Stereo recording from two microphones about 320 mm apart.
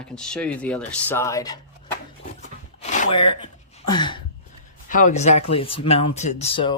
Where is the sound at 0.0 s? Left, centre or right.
Centre.